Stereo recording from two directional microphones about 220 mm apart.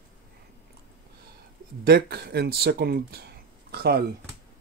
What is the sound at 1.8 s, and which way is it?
Speech, 45° right (ahead or behind).